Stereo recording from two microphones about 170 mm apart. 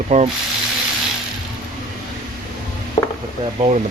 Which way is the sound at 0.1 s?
40° right (ahead or behind).